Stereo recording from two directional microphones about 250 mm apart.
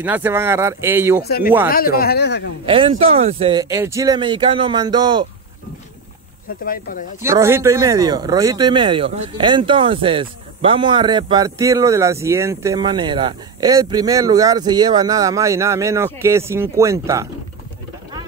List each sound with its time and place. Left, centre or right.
0.0 s speech: centre
1.7 s speech: left
2.6 s speech: right
6.6 s speech: left
7.2 s speech: centre